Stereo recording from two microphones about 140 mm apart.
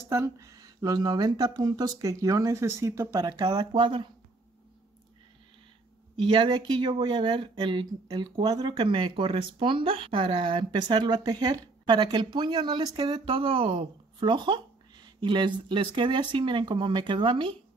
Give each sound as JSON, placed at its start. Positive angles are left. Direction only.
{"t": 0.1, "sound": "speech", "side_deg": -20}
{"t": 6.1, "sound": "speech", "side_deg": -35}